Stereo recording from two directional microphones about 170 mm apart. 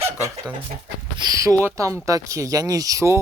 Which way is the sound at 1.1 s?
20° right (ahead or behind).